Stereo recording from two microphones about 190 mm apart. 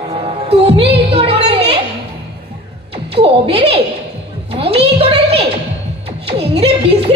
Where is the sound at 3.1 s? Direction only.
30° right (ahead or behind).